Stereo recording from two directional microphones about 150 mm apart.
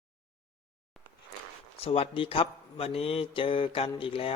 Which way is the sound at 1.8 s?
40° left (ahead or behind).